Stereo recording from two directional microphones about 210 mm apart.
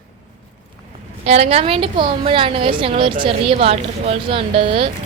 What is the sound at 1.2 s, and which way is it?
A woman's voice, 30° right (ahead or behind).